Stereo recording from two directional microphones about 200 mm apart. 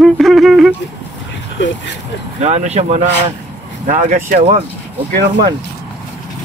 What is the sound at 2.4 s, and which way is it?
Speech, 35° right (ahead or behind).